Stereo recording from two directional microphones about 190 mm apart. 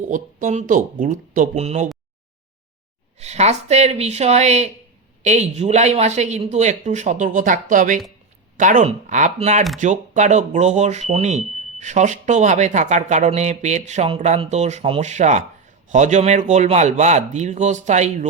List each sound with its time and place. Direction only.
0.1 s speech: 40° right (ahead or behind)
3.2 s speech: 35° right (ahead or behind)